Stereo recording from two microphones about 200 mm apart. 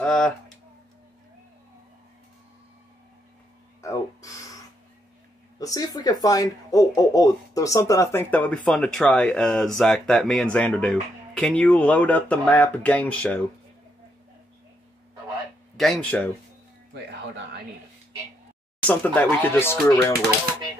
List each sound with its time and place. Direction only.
0.0 s a sound: 5° left (ahead or behind)
3.8 s a sound: 15° left (ahead or behind)
5.6 s speech: 20° left (ahead or behind)
15.8 s speech: 5° left (ahead or behind)
16.9 s speech: 60° right (ahead or behind)
18.8 s speech: 5° left (ahead or behind)